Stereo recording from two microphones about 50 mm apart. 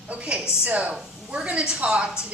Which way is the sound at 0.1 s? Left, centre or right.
Right.